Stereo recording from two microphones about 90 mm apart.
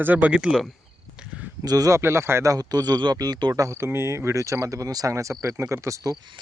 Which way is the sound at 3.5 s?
30° right (ahead or behind).